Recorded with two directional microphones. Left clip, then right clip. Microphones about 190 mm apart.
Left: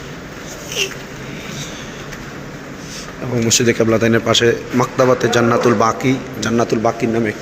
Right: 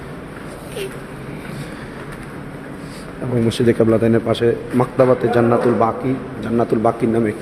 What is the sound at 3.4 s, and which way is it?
Speech, 15° right (ahead or behind).